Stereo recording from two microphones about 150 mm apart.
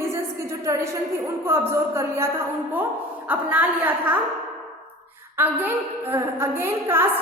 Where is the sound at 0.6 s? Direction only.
20° right (ahead or behind).